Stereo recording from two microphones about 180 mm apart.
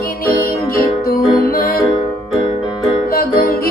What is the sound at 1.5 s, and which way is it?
Music, 55° left (ahead or behind).